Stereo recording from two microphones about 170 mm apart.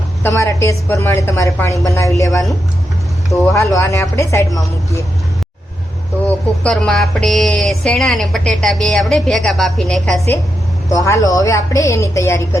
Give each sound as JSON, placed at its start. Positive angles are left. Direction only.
{"t": 0.2, "sound": "a woman's voice", "side_deg": 15}
{"t": 3.4, "sound": "a woman's voice", "side_deg": 15}
{"t": 6.6, "sound": "a woman's voice", "side_deg": 5}
{"t": 10.8, "sound": "a woman's voice", "side_deg": 20}